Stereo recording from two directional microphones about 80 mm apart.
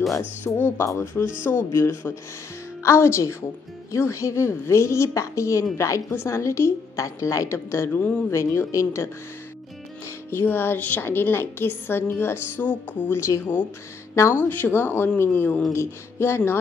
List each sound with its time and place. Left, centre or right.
0.5 s a woman's voice: centre
0.8 s a woman's voice: left
10.3 s a woman's voice: left
14.3 s a woman's voice: left